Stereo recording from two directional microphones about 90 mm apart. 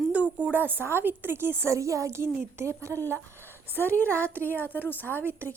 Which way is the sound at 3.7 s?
20° left (ahead or behind).